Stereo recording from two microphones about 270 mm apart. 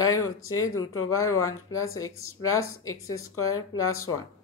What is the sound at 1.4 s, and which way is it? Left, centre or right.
Speech, centre.